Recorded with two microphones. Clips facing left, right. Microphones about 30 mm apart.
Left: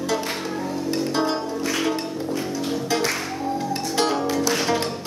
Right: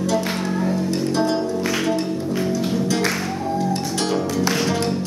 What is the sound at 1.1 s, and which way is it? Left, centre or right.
Music, centre.